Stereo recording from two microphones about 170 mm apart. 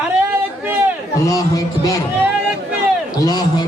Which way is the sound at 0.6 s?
10° right (ahead or behind).